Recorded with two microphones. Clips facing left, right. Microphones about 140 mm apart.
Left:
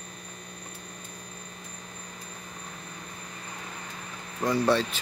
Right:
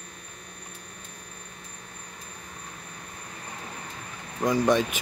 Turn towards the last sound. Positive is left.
turn(degrees=-15)  # may be behind; listen again after turning